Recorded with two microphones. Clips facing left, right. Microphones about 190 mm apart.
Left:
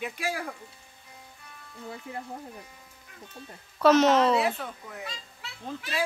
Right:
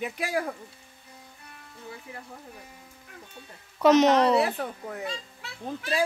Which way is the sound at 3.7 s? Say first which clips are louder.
Right 1 dB; 15° right (ahead or behind).